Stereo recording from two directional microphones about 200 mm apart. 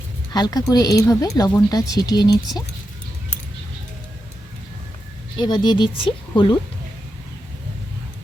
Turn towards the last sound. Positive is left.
turn(degrees=25)  # may be behind; listen again after turning